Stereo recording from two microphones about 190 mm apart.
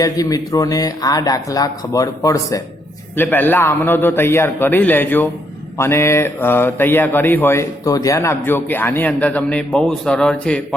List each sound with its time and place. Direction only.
0.0 s speech: 20° left (ahead or behind)